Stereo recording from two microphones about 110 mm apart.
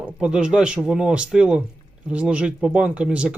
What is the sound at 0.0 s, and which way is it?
Speech, 10° right (ahead or behind).